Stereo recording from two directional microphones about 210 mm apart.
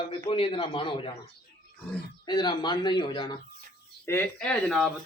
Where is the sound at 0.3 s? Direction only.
25° left (ahead or behind).